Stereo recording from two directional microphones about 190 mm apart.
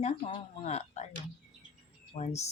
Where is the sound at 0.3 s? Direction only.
35° left (ahead or behind).